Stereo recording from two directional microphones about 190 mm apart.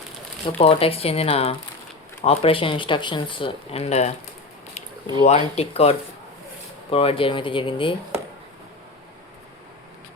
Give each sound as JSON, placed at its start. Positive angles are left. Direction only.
{"t": 0.6, "sound": "speech", "side_deg": 30}
{"t": 5.2, "sound": "speech", "side_deg": 35}